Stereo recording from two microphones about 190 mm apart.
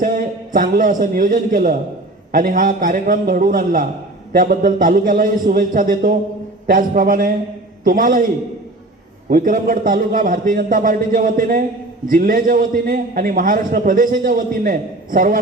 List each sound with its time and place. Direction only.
0.0 s a man's voice: 45° right (ahead or behind)
9.3 s a man's voice: 45° right (ahead or behind)